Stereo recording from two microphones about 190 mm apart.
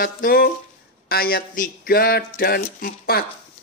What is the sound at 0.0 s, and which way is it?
Speech, 50° left (ahead or behind).